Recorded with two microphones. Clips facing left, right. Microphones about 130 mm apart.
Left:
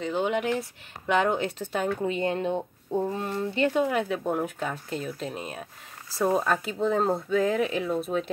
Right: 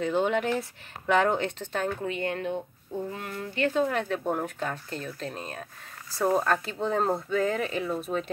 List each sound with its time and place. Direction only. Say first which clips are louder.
0.0 s speech: right 1 dB; centre (ahead or behind)
2.0 s speech: left 3 dB; 20° left (ahead or behind)
2.9 s speech: left 6 dB; 40° left (ahead or behind)
3.7 s speech: left 1 dB; 10° left (ahead or behind)